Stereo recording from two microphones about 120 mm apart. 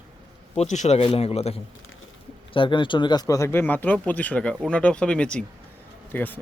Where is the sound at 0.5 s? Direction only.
75° left (ahead or behind).